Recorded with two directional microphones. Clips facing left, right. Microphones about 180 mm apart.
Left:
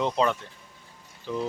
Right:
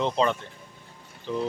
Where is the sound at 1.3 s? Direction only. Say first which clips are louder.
Right 1 dB; 5° left (ahead or behind).